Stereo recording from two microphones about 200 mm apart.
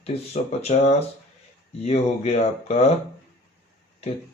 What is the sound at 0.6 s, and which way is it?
Speech, 30° left (ahead or behind).